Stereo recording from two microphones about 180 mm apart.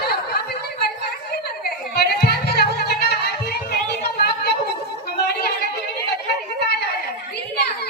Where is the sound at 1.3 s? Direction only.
60° left (ahead or behind).